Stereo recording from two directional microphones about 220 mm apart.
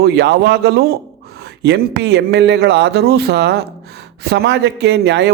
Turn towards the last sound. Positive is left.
turn(degrees=-50)  # may be behind; listen again after turning